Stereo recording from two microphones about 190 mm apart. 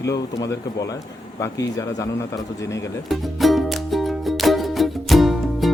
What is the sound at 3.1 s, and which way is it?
Music, centre (ahead or behind).